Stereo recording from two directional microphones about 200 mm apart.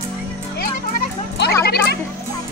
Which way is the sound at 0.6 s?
50° left (ahead or behind).